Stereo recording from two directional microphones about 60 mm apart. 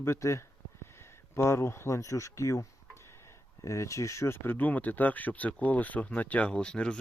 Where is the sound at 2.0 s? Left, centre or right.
Left.